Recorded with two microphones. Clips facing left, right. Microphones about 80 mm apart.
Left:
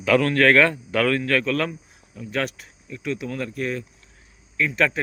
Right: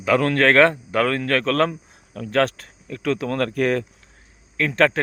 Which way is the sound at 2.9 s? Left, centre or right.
Right.